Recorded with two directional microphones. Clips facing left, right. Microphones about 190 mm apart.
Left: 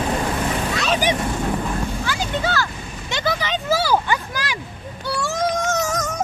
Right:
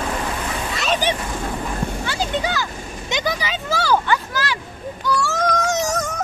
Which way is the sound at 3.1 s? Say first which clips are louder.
Even; 15° right (ahead or behind).